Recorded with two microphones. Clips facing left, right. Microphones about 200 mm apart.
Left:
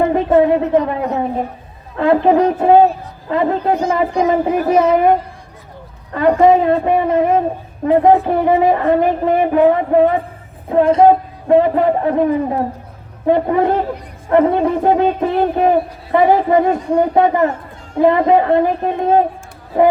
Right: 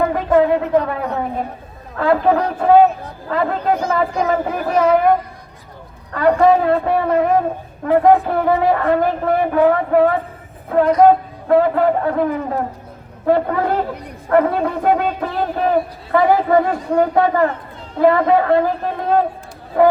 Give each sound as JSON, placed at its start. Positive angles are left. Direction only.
{"t": 0.0, "sound": "a woman's voice", "side_deg": 25}
{"t": 6.1, "sound": "a man's voice", "side_deg": 20}
{"t": 13.2, "sound": "a man's voice", "side_deg": 20}